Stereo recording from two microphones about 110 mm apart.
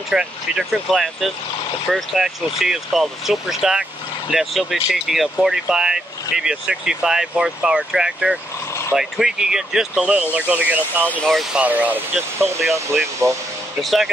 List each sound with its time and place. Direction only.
0.1 s speech: 5° right (ahead or behind); by 13.4 s 25° right (ahead or behind)
13.7 s speech: centre (ahead or behind)